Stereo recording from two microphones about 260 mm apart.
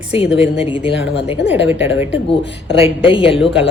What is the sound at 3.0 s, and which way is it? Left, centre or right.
Speech, left.